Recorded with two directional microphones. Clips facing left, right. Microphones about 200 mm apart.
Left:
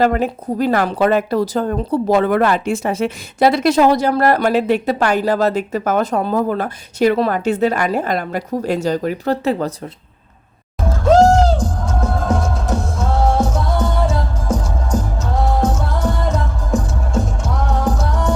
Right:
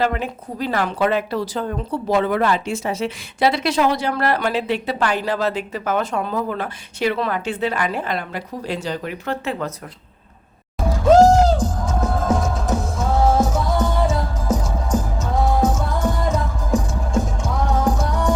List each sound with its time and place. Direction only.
0.0 s speech: 45° left (ahead or behind)
11.0 s speech: 5° right (ahead or behind)
11.8 s music: 5° right (ahead or behind)